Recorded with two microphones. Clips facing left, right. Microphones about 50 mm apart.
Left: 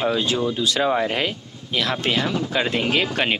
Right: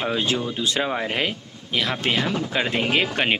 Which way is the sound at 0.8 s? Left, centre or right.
Centre.